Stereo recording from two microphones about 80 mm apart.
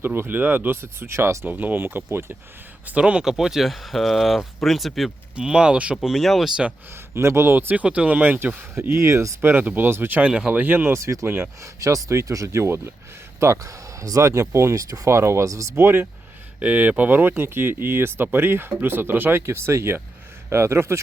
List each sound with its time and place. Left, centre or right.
0.0 s speech: right
1.5 s speech: right
2.8 s speech: centre
5.4 s speech: centre
7.1 s speech: right
8.7 s speech: right
15.7 s speech: right
16.6 s speech: centre; by 21.0 s right